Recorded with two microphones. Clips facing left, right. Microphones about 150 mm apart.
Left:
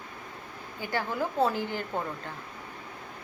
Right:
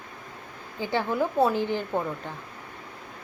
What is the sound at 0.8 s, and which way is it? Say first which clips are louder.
A woman's voice: right 5 dB; 20° right (ahead or behind).